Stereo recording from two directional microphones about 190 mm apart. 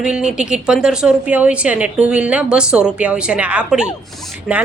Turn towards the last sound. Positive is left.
turn(degrees=-5)  # may be behind; listen again after turning